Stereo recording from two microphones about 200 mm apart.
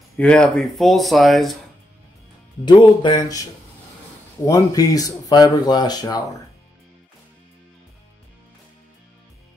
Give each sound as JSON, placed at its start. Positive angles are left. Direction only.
{"t": 0.2, "sound": "speech", "side_deg": 5}
{"t": 2.6, "sound": "speech", "side_deg": 25}
{"t": 4.5, "sound": "speech", "side_deg": 20}